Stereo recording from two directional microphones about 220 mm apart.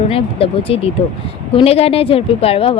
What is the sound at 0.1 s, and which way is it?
Speech, 25° left (ahead or behind).